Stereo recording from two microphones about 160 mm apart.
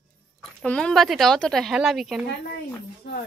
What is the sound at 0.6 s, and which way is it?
A woman's voice, 5° left (ahead or behind).